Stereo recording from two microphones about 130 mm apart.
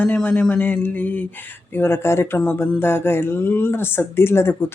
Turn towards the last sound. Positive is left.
turn(degrees=20)  # may be behind; listen again after turning